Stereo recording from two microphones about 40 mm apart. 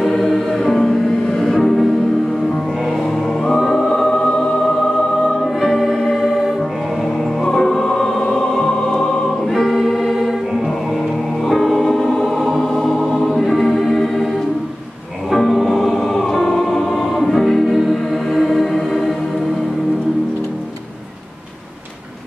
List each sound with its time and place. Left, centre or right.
0.0 s music: centre
3.0 s music: centre
6.2 s music: centre
7.5 s music: centre
9.0 s choir: centre
11.4 s music: centre
15.3 s music: centre
16.3 s choir: centre
18.1 s music: centre